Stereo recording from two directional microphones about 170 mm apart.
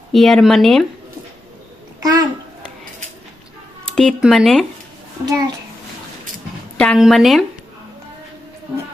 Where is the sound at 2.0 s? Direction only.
20° right (ahead or behind).